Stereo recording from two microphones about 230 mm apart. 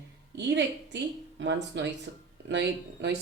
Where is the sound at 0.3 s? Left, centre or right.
Right.